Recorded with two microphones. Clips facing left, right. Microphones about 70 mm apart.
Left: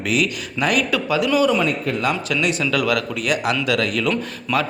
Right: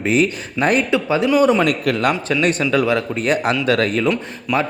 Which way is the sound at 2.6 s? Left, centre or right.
Right.